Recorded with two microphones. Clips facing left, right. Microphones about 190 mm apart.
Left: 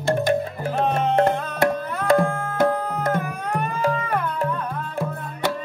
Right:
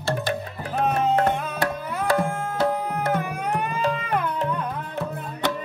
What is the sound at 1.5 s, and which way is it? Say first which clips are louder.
Tabla: left 4 dB; 20° left (ahead or behind).